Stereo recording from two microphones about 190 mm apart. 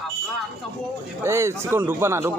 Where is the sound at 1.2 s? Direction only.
15° right (ahead or behind).